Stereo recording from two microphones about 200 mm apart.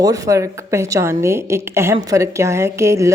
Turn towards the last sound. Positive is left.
turn(degrees=-15)  # may be behind; listen again after turning